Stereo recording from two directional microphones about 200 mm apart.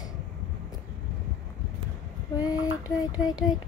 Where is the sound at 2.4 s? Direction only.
20° left (ahead or behind).